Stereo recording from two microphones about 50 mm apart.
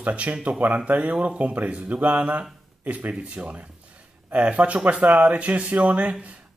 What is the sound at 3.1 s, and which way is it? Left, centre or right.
Speech, right.